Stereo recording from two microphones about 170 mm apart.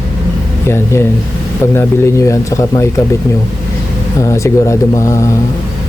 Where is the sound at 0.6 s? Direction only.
15° left (ahead or behind).